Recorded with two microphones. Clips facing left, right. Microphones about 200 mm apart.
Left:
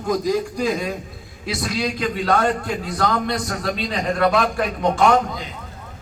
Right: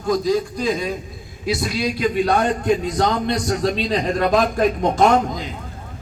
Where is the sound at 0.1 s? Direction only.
10° left (ahead or behind).